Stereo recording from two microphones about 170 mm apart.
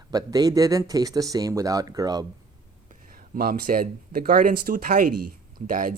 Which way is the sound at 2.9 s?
55° right (ahead or behind).